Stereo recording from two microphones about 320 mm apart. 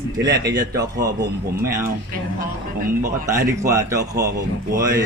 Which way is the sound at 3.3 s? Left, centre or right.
Centre.